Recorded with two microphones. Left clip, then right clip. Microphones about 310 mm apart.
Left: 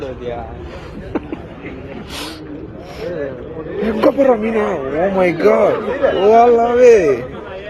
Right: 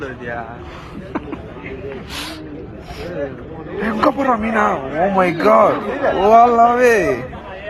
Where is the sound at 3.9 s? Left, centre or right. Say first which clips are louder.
Left 3 dB; centre.